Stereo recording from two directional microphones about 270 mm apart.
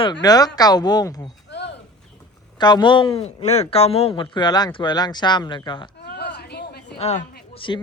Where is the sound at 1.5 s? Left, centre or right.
Left.